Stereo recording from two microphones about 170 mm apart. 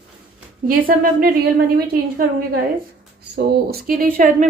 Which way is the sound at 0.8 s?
55° right (ahead or behind).